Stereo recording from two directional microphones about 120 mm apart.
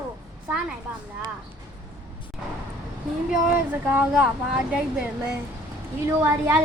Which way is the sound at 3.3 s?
15° right (ahead or behind).